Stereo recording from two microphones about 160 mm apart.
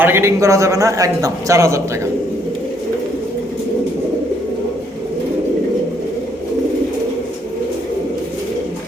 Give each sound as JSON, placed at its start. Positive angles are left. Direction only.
{"t": 0.0, "sound": "a man's voice", "side_deg": -15}